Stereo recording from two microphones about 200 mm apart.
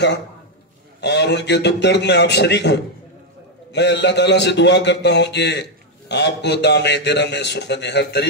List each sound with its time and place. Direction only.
1.0 s speech: 60° left (ahead or behind)